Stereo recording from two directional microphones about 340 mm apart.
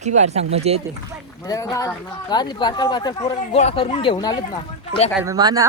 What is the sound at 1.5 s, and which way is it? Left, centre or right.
Speech, centre.